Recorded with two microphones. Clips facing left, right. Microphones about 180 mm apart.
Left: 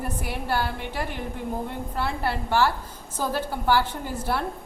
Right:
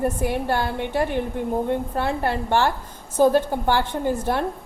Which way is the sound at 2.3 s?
25° right (ahead or behind).